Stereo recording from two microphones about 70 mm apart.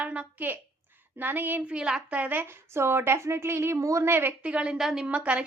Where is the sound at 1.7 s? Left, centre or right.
Centre.